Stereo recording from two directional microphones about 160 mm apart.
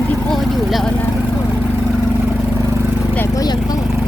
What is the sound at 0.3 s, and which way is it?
Vehicle, centre (ahead or behind).